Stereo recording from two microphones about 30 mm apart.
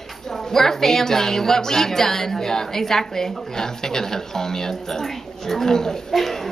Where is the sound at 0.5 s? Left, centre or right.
Centre.